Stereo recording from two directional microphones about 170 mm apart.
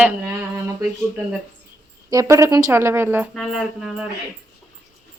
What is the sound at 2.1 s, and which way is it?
A woman's voice, 20° right (ahead or behind).